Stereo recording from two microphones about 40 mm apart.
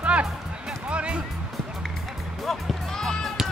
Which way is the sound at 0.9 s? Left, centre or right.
Right.